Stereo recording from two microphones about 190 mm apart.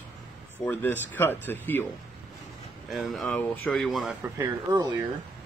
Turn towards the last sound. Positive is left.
turn(degrees=-15)  # may be behind; listen again after turning